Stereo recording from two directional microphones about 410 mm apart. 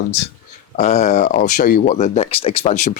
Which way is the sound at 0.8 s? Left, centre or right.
Centre.